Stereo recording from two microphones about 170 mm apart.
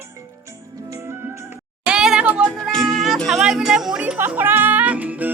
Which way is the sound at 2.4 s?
5° left (ahead or behind).